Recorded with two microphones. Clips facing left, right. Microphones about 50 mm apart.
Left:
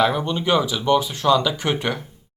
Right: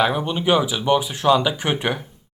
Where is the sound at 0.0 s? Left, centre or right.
Centre.